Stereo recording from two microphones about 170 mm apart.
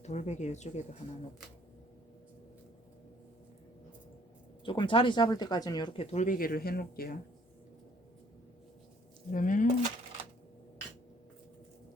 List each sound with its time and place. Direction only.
0.0 s speech: 40° left (ahead or behind)
4.6 s speech: 30° left (ahead or behind); by 7.2 s 60° left (ahead or behind)
9.3 s speech: 50° left (ahead or behind)